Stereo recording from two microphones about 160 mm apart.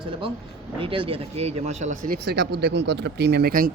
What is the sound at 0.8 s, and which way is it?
Speech, 35° right (ahead or behind).